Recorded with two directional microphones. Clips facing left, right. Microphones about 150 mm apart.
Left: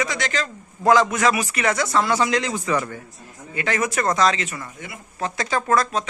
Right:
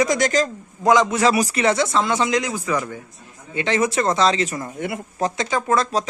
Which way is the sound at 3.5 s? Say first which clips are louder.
Right 3 dB; 25° right (ahead or behind).